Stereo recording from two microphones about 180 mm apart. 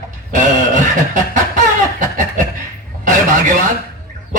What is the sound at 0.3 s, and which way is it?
Snicker, 45° right (ahead or behind).